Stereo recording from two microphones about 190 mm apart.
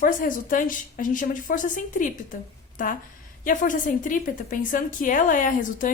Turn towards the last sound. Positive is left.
turn(degrees=45)  # may be behind; listen again after turning